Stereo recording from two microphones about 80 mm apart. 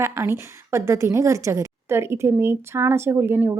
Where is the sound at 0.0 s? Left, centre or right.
Right.